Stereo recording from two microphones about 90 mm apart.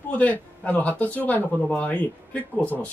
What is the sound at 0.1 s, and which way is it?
Speech, 15° left (ahead or behind).